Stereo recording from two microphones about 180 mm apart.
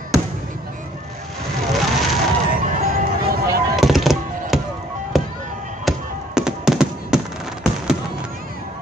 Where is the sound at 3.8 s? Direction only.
Centre (ahead or behind).